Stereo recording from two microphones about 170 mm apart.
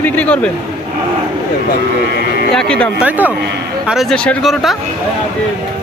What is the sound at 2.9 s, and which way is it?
Speech, 10° right (ahead or behind).